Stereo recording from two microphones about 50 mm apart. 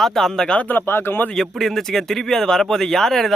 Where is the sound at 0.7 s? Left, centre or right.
Left.